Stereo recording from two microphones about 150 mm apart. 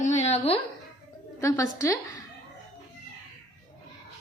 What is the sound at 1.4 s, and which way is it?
Speech, 20° left (ahead or behind).